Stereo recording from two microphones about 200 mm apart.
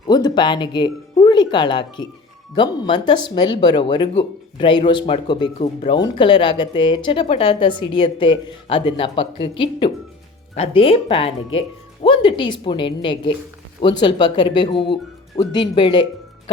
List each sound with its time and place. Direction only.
0.1 s speech: 20° left (ahead or behind)